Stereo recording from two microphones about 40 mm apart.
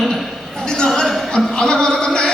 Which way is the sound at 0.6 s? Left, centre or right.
Centre.